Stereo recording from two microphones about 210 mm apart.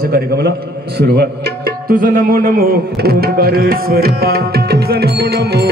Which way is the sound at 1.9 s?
40° right (ahead or behind).